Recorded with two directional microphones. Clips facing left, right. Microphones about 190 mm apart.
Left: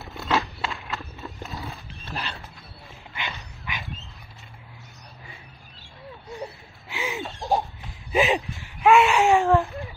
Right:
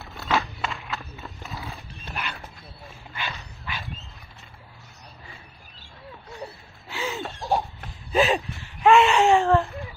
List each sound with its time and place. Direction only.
0.0 s horse: centre (ahead or behind)
3.2 s dog: 15° left (ahead or behind)
6.4 s a sound: 15° left (ahead or behind)
8.8 s speech: centre (ahead or behind)
9.3 s speech: 15° left (ahead or behind)
9.6 s a sound: centre (ahead or behind)